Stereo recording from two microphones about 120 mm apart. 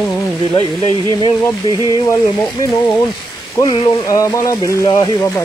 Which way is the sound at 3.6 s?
30° left (ahead or behind).